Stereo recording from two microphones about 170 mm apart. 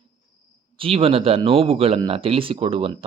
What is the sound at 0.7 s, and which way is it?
Speech, 35° right (ahead or behind).